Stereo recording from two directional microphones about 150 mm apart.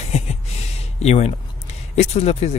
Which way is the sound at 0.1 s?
45° left (ahead or behind).